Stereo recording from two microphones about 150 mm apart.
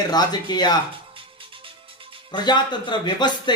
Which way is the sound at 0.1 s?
25° left (ahead or behind).